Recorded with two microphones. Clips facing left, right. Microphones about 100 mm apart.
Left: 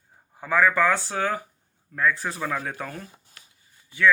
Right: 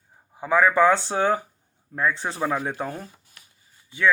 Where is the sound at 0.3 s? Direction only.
15° right (ahead or behind).